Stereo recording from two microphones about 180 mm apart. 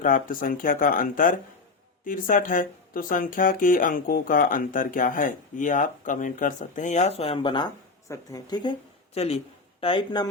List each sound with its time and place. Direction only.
0.0 s speech: 50° left (ahead or behind); by 8.7 s 25° left (ahead or behind)
9.1 s speech: 35° left (ahead or behind)